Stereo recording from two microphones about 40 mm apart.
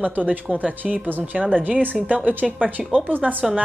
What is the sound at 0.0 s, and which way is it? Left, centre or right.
A woman's voice, right.